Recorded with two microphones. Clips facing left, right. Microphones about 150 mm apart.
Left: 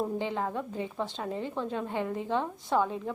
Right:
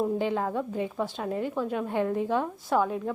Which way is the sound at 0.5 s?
15° right (ahead or behind).